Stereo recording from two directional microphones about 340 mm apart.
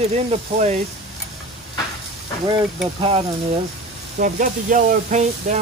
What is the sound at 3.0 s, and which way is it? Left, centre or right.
Speech, centre.